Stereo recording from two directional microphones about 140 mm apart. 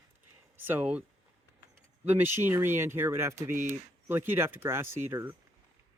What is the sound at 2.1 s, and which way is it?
Speech, 15° right (ahead or behind).